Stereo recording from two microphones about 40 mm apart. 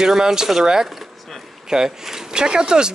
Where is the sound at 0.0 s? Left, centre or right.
Centre.